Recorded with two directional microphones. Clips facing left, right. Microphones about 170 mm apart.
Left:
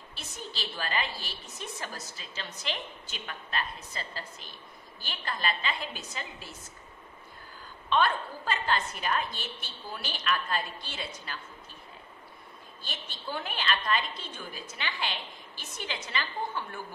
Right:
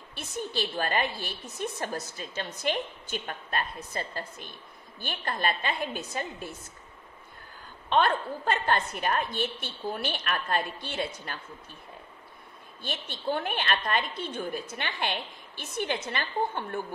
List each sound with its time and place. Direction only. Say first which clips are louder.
0.1 s a woman's voice: right 9 dB; 55° right (ahead or behind)
7.9 s a woman's voice: right 2 dB; 55° right (ahead or behind)
12.8 s a woman's voice: right 8 dB; 55° right (ahead or behind)